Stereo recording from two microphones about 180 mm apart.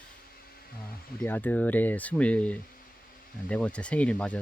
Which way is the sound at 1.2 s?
10° left (ahead or behind).